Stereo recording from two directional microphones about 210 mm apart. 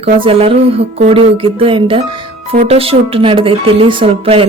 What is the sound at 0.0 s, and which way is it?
Speech, 25° right (ahead or behind).